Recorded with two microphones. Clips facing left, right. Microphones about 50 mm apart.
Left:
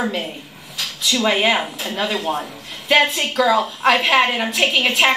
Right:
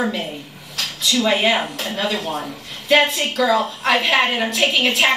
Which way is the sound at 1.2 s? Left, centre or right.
Centre.